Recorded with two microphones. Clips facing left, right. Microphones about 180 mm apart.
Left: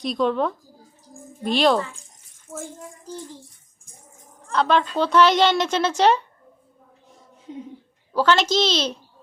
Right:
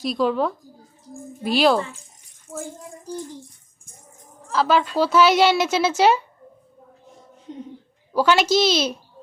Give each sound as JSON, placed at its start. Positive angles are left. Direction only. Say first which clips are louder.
{"t": 0.0, "sound": "speech", "louder": "right 1 dB", "side_deg": -5}
{"t": 4.4, "sound": "a woman's voice", "louder": "right 1 dB", "side_deg": -5}
{"t": 7.5, "sound": "speech", "louder": "even", "side_deg": 5}
{"t": 8.1, "sound": "a woman's voice", "louder": "right 1 dB", "side_deg": -10}